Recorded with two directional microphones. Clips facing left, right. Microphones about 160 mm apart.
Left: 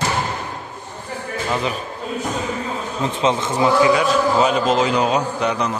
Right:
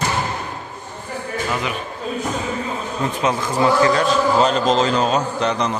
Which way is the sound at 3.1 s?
25° left (ahead or behind).